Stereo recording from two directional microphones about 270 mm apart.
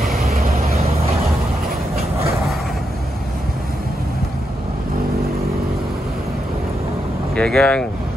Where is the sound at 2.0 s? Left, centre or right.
Centre.